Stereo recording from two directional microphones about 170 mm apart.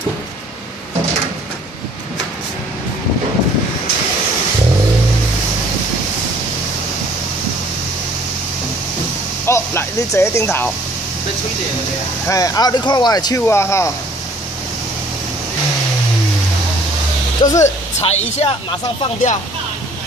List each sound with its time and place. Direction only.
9.5 s speech: 15° left (ahead or behind)
12.3 s speech: 20° left (ahead or behind)
17.4 s speech: 20° left (ahead or behind)
17.6 s speech: 40° left (ahead or behind)